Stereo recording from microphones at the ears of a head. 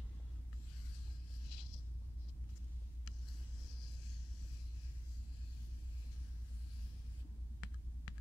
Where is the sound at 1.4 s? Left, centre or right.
Left.